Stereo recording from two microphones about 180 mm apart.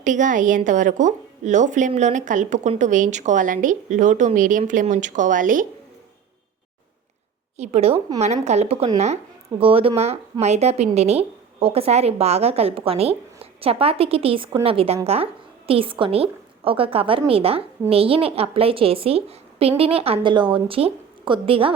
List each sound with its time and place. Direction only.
0.0 s a woman's voice: 45° right (ahead or behind)
7.5 s a woman's voice: 35° right (ahead or behind)